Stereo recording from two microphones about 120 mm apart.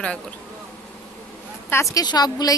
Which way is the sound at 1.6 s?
25° left (ahead or behind).